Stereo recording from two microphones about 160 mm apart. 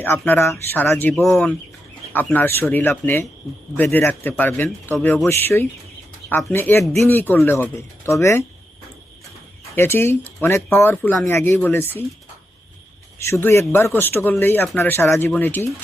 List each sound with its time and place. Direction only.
0.0 s a man's voice: 15° left (ahead or behind)
9.7 s a man's voice: 15° left (ahead or behind)
13.1 s a man's voice: 15° left (ahead or behind)